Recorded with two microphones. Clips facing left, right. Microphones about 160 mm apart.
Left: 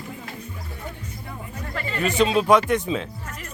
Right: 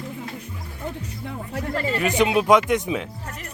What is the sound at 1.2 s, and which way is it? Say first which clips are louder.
Music: right 7 dB; 70° right (ahead or behind).